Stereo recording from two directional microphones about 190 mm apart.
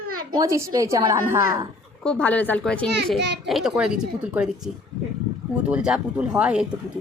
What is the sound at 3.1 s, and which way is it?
Speech, 65° right (ahead or behind).